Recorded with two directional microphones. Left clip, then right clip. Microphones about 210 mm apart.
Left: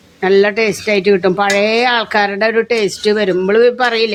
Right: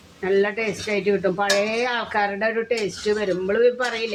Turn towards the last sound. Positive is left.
turn(degrees=55)  # may be behind; listen again after turning